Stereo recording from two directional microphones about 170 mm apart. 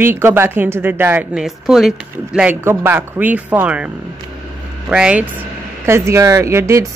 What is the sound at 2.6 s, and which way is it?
Speech, 15° right (ahead or behind).